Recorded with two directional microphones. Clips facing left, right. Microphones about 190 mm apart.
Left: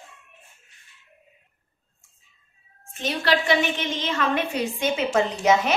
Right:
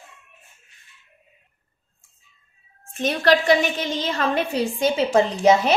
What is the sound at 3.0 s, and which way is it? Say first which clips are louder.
A woman's voice: right 5 dB; 45° right (ahead or behind).